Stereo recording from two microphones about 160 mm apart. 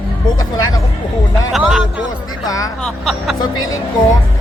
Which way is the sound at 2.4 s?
20° left (ahead or behind).